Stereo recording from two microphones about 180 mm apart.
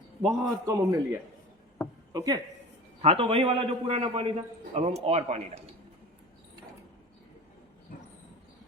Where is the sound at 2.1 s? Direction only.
20° right (ahead or behind).